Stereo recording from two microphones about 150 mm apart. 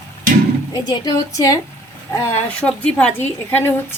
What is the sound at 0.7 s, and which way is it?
A woman's voice, 25° left (ahead or behind).